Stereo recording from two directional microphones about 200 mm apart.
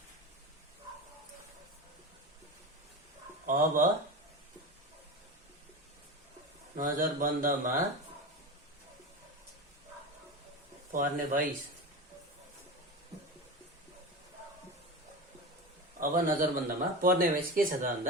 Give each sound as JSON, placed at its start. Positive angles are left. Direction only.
{"t": 3.4, "sound": "speech", "side_deg": -40}
{"t": 6.7, "sound": "speech", "side_deg": -45}
{"t": 10.9, "sound": "speech", "side_deg": -40}
{"t": 16.0, "sound": "speech", "side_deg": -45}